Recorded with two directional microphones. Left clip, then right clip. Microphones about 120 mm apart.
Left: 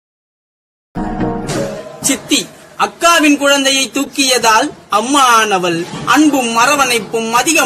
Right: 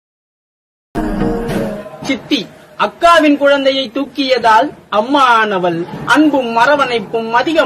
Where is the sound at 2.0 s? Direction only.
30° left (ahead or behind).